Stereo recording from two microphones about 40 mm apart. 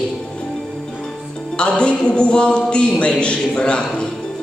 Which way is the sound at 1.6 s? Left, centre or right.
Left.